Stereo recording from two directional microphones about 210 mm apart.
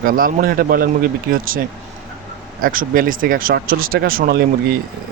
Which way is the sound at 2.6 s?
40° right (ahead or behind).